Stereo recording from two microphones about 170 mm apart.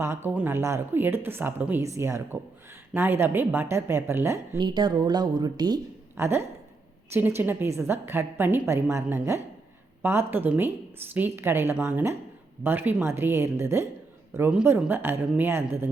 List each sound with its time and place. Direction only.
0.0 s a woman's voice: 15° right (ahead or behind)
4.6 s a woman's voice: 25° right (ahead or behind)